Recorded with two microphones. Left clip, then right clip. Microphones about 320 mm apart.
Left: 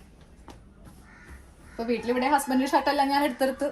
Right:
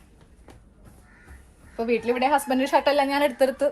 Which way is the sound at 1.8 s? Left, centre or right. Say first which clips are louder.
Right 3 dB; centre.